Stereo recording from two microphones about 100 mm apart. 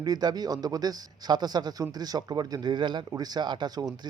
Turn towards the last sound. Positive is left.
turn(degrees=-45)  # may be behind; listen again after turning